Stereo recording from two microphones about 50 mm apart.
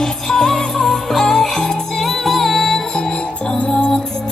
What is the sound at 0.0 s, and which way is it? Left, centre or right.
Music, centre.